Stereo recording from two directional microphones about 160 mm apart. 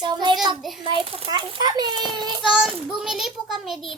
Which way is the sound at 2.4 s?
5° right (ahead or behind).